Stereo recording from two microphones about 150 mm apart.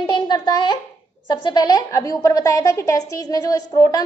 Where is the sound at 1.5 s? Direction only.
25° left (ahead or behind).